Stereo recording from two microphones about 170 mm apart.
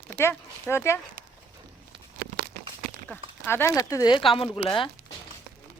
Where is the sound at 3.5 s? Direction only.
15° left (ahead or behind).